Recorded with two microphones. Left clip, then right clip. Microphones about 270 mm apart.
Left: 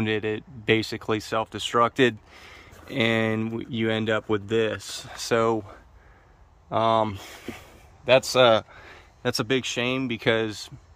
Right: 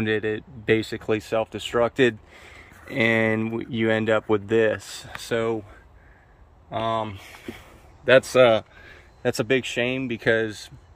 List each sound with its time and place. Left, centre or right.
0.0 s speech: centre
6.7 s speech: centre
8.3 s a sound: centre
9.8 s speech: centre